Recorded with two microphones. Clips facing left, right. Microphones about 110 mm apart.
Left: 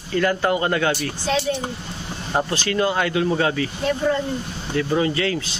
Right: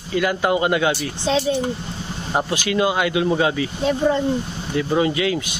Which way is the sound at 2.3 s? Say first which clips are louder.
Right 1 dB; 15° right (ahead or behind).